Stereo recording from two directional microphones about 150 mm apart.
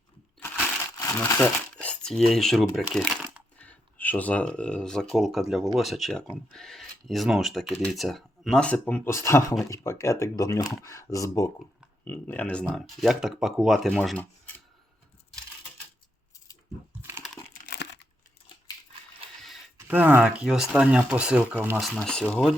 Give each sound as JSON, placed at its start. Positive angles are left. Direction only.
{"t": 1.2, "sound": "speech", "side_deg": 10}
{"t": 17.0, "sound": "a sound", "side_deg": -15}
{"t": 19.9, "sound": "speech", "side_deg": -10}
{"t": 21.8, "sound": "speech", "side_deg": 5}